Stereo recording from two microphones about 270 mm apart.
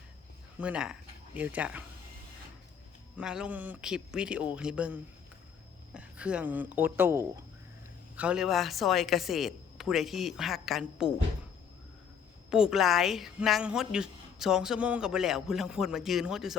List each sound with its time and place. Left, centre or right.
0.6 s speech: centre
3.2 s a woman's voice: centre
12.5 s a woman's voice: centre